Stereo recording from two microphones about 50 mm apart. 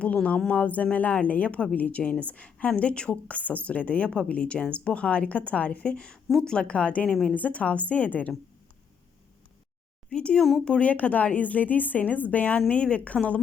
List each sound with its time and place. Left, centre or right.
0.3 s a woman's voice: left
7.1 s speech: centre
7.3 s a woman's voice: left
10.1 s a woman's voice: left